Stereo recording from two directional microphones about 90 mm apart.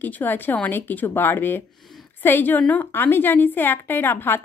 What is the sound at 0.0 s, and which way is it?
A woman's voice, 20° left (ahead or behind).